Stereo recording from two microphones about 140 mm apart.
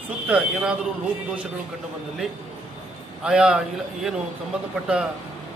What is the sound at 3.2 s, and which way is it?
Speech, 5° right (ahead or behind).